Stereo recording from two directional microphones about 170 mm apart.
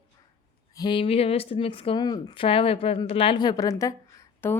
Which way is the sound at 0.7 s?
25° left (ahead or behind).